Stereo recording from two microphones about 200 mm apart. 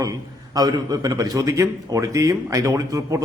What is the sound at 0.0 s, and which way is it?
A man's voice, 20° right (ahead or behind).